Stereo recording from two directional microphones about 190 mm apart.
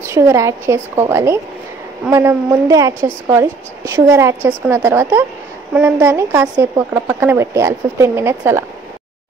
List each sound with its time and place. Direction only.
0.0 s a woman's voice: 15° right (ahead or behind)